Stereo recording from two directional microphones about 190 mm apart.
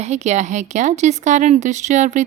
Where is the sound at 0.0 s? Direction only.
35° right (ahead or behind).